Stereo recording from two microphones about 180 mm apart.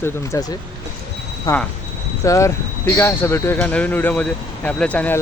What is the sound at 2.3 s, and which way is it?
Speech, 15° left (ahead or behind).